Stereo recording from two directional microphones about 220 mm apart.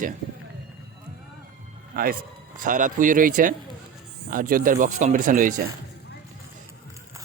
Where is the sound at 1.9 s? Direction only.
40° right (ahead or behind).